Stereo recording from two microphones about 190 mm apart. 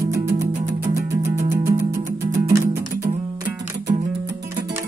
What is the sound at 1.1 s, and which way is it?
Music, 15° right (ahead or behind).